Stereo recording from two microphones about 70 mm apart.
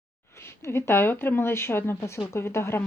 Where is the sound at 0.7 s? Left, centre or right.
Left.